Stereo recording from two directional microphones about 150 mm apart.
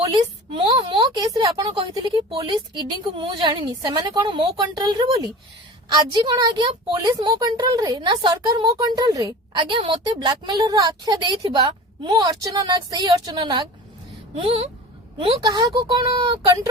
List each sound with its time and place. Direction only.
0.0 s a woman's voice: 35° right (ahead or behind)